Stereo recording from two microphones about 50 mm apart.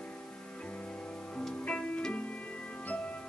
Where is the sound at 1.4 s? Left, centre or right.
Left.